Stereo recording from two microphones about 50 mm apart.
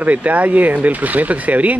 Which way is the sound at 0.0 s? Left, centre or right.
Right.